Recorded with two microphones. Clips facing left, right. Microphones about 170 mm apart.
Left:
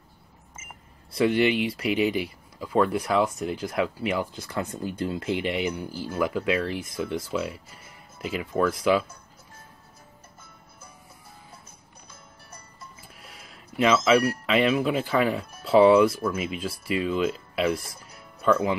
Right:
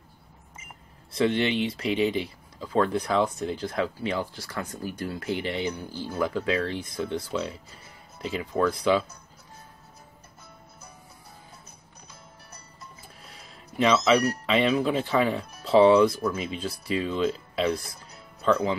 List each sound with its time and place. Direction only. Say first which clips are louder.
1.1 s speech: left 2 dB; 5° left (ahead or behind)
4.3 s speech: left 4 dB; 20° left (ahead or behind)
13.2 s a sound: even; 5° left (ahead or behind)
14.4 s speech: left 1 dB; 5° left (ahead or behind)